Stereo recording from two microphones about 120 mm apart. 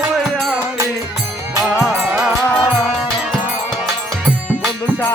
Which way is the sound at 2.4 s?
10° left (ahead or behind).